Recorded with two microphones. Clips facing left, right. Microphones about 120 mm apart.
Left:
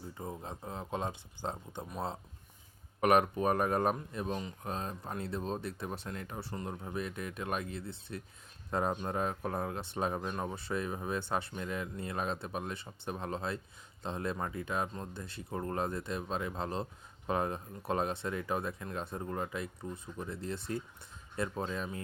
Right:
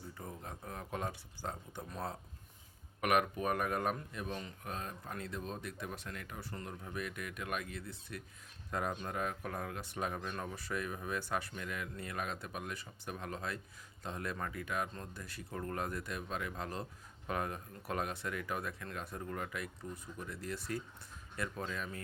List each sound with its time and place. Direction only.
0.1 s speech: 25° left (ahead or behind)
3.0 s speech: 35° left (ahead or behind)